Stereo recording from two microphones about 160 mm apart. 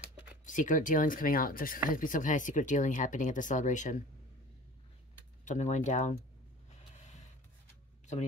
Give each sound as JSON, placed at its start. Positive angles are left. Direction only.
{"t": 0.0, "sound": "a sound", "side_deg": -10}
{"t": 0.5, "sound": "speech", "side_deg": 55}
{"t": 5.4, "sound": "speech", "side_deg": 50}